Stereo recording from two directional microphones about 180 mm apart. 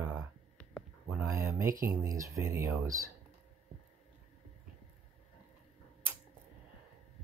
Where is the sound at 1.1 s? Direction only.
15° right (ahead or behind).